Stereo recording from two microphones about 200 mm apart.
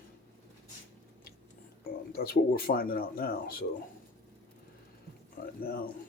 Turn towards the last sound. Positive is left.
turn(degrees=45)  # may be behind; listen again after turning